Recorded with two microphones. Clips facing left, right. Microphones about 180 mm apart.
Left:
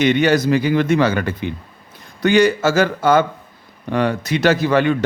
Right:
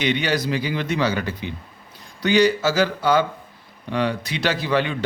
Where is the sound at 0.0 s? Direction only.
45° left (ahead or behind).